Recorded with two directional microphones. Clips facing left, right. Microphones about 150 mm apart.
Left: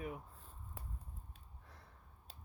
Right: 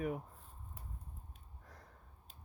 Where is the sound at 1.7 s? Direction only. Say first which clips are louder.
Right 4 dB; 45° right (ahead or behind).